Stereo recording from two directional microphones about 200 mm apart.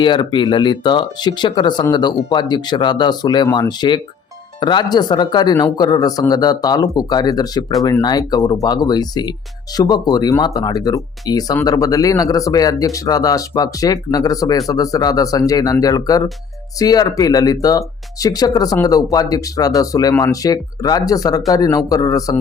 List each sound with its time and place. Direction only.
0.0 s speech: 25° left (ahead or behind)